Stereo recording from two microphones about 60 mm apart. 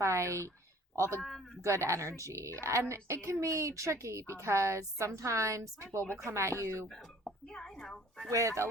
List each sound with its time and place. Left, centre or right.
0.0 s a woman's voice: right
1.2 s speech: centre
1.6 s a woman's voice: right
7.4 s a sound: centre
8.3 s a woman's voice: right